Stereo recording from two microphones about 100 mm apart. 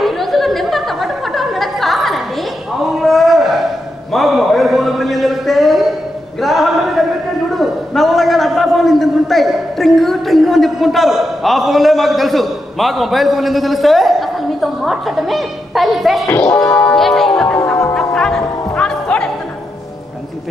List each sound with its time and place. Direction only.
0.0 s a sound: centre (ahead or behind)
16.5 s music: 35° left (ahead or behind)
16.9 s music: centre (ahead or behind)